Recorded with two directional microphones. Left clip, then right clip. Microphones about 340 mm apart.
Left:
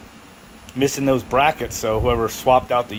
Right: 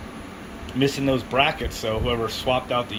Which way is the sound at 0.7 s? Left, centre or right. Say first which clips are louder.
Left 3 dB; centre.